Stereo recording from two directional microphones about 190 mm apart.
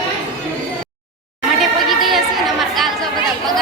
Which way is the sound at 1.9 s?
Centre (ahead or behind).